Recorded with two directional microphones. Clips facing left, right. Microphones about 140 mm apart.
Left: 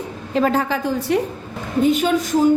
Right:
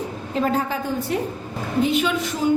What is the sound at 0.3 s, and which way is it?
Speech, 90° left.